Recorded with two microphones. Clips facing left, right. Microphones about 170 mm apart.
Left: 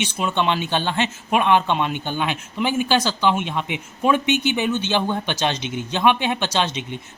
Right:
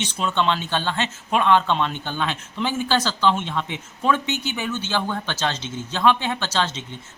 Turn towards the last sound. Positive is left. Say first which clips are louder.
# left 2 dB
turn(degrees=15)  # may be behind; listen again after turning